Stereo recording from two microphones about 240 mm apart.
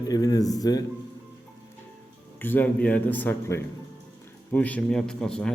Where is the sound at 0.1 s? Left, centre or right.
Centre.